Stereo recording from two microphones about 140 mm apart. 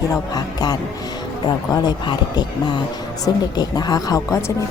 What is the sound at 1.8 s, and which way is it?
A woman's voice, 30° left (ahead or behind).